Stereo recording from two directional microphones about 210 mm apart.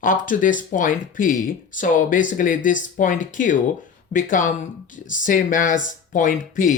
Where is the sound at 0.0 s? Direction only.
40° left (ahead or behind).